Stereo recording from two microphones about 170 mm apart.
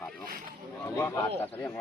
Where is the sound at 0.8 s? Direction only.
15° left (ahead or behind).